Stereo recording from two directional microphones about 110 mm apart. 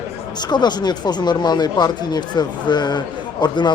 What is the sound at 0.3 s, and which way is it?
Speech, 40° left (ahead or behind).